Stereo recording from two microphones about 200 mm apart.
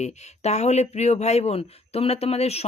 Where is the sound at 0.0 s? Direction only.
35° left (ahead or behind).